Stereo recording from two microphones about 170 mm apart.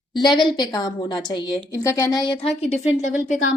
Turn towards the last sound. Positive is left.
turn(degrees=45)  # may be behind; listen again after turning